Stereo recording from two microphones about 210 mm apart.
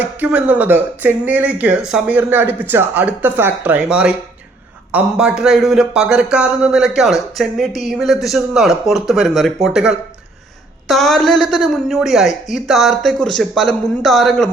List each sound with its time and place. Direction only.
0.0 s speech: 5° right (ahead or behind)